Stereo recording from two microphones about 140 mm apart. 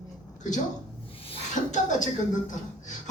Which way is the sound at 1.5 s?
60° left (ahead or behind).